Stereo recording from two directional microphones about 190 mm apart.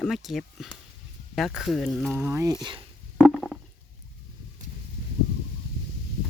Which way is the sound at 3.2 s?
Centre (ahead or behind).